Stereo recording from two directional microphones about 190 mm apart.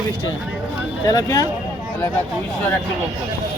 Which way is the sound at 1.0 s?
20° left (ahead or behind).